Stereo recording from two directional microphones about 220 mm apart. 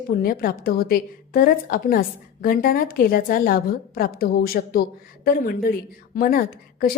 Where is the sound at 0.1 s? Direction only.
40° left (ahead or behind).